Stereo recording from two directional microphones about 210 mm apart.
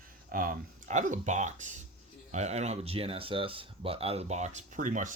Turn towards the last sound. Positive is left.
turn(degrees=-35)  # may be behind; listen again after turning